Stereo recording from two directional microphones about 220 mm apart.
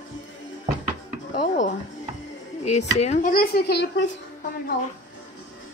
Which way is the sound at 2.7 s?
30° left (ahead or behind).